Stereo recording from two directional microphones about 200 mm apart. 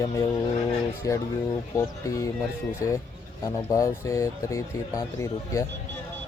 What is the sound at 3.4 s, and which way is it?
Speech, 15° left (ahead or behind).